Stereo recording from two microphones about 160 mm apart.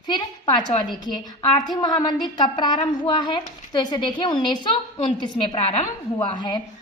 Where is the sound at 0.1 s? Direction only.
25° left (ahead or behind).